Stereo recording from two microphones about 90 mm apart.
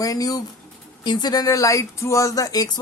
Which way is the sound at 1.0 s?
55° left (ahead or behind).